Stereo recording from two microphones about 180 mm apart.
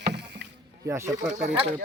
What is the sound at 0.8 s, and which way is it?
Speech, 15° right (ahead or behind).